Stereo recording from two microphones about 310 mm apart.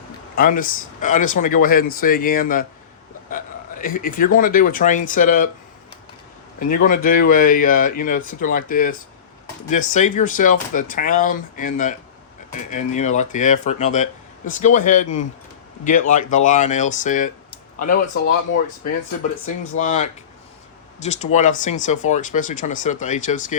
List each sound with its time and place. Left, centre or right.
0.3 s speech: left
3.2 s a sound: left
4.4 s speech: left
6.6 s speech: left
19.7 s speech: left